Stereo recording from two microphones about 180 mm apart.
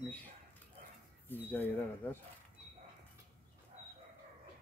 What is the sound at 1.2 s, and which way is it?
Speech, 10° left (ahead or behind).